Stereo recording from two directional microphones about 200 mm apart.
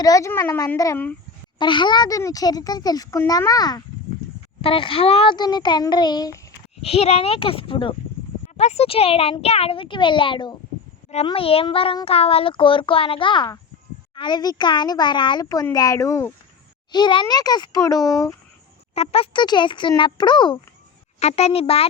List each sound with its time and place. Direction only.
0.0 s a child's voice: 15° left (ahead or behind)
1.5 s a child's voice: 25° left (ahead or behind)
6.8 s a child's voice: 30° left (ahead or behind)
18.9 s a child's voice: 30° left (ahead or behind)